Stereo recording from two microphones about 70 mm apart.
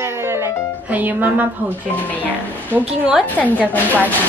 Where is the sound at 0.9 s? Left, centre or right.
Right.